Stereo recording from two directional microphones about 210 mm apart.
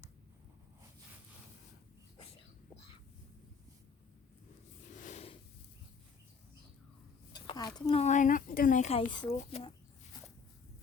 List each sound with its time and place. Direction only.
4.9 s snort: 35° left (ahead or behind)
7.3 s speech: 20° left (ahead or behind)